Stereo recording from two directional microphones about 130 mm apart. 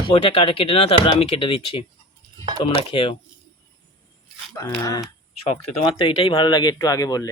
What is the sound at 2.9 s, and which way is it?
Speech, 45° left (ahead or behind).